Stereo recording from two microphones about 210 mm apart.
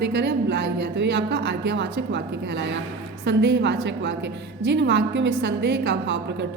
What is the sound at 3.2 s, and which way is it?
A woman's voice, 55° right (ahead or behind).